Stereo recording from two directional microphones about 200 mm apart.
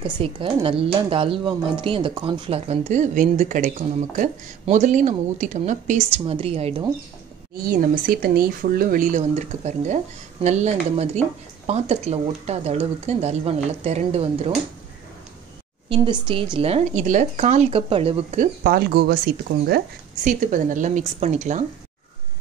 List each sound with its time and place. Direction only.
0.0 s speech: 25° right (ahead or behind)
7.6 s speech: 45° right (ahead or behind)
15.9 s speech: 25° right (ahead or behind); by 19.1 s 50° right (ahead or behind)
20.2 s speech: 40° right (ahead or behind)